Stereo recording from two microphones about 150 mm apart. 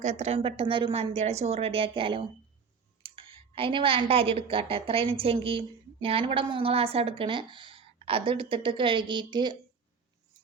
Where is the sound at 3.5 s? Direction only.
35° right (ahead or behind).